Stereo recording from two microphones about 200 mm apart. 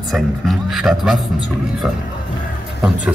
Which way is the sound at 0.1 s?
Centre (ahead or behind).